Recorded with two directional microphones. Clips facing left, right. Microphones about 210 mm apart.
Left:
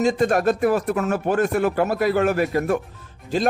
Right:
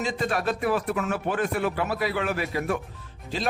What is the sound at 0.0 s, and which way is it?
Speech, 45° left (ahead or behind).